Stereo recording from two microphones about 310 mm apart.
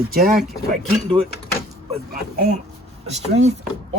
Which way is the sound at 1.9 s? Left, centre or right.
Right.